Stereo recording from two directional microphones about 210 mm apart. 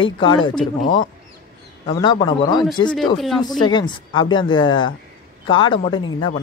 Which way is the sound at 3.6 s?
20° left (ahead or behind).